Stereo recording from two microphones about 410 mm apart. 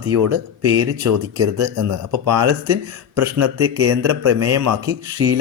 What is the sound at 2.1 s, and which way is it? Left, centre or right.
Speech, right.